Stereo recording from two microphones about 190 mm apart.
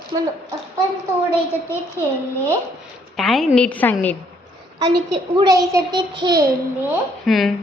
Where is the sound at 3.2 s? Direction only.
Centre (ahead or behind).